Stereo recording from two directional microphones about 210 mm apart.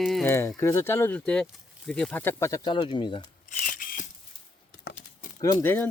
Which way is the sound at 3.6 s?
40° left (ahead or behind).